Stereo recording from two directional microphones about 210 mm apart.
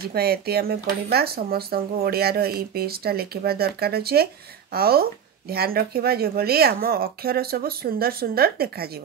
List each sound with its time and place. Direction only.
0.0 s speech: 50° right (ahead or behind)